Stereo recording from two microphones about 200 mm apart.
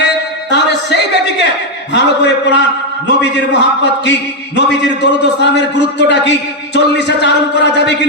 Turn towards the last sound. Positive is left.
turn(degrees=60)  # may be behind; listen again after turning